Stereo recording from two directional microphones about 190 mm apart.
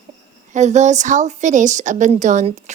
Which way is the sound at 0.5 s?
40° right (ahead or behind).